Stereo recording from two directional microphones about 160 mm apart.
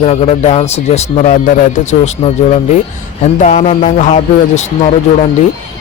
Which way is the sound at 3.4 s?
45° left (ahead or behind).